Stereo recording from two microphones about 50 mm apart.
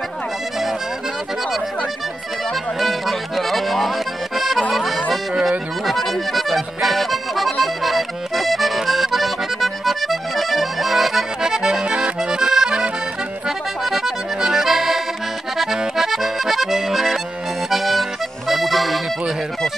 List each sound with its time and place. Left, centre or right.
2.8 s music: centre
5.4 s accordion: centre
17.6 s music: centre